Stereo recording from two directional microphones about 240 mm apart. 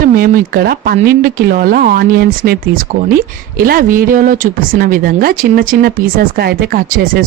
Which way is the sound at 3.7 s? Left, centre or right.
Right.